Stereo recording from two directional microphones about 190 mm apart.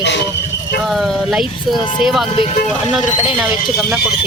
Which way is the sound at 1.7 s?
25° left (ahead or behind).